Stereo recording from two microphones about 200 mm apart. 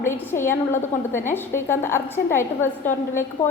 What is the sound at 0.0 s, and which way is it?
A woman's voice, 10° left (ahead or behind).